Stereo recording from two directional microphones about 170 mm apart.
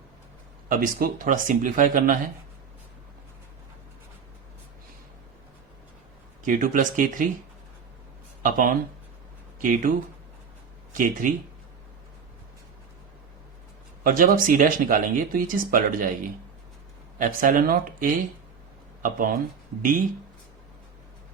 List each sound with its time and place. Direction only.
0.7 s speech: 60° right (ahead or behind)
6.4 s speech: 50° right (ahead or behind)
8.4 s speech: 50° right (ahead or behind)
10.9 s speech: 50° right (ahead or behind)
14.0 s speech: 55° right (ahead or behind)